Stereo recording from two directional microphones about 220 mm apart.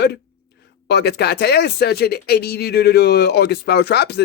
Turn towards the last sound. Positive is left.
turn(degrees=50)  # may be behind; listen again after turning